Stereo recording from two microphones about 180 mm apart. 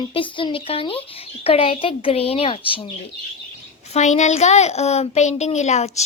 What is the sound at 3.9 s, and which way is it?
A child's voice, 40° left (ahead or behind).